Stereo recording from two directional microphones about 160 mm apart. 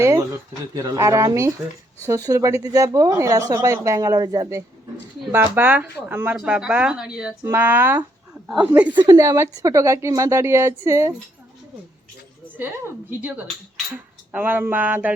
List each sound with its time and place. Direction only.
0.0 s a sound: 20° right (ahead or behind)
0.8 s speech: 20° right (ahead or behind)
8.9 s speech: 30° right (ahead or behind)
13.1 s speech: 10° right (ahead or behind)